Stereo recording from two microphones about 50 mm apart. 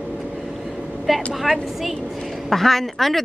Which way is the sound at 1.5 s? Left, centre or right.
Centre.